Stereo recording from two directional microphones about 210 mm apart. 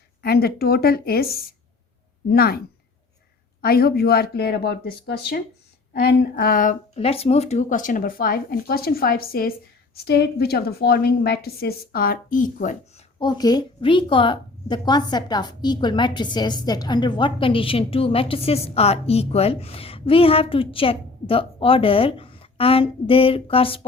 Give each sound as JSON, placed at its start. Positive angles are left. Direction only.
{"t": 0.2, "sound": "speech", "side_deg": 45}
{"t": 3.6, "sound": "speech", "side_deg": 45}
{"t": 13.1, "sound": "a woman's voice", "side_deg": 20}